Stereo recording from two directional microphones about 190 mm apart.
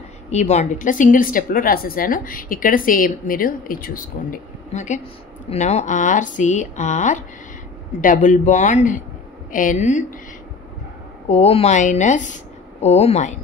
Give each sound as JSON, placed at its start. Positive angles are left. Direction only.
{"t": 0.3, "sound": "a woman's voice", "side_deg": 35}
{"t": 11.2, "sound": "speech", "side_deg": 30}